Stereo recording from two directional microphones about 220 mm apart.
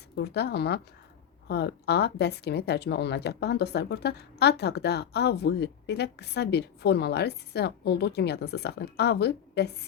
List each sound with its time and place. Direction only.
0.2 s speech: 50° left (ahead or behind)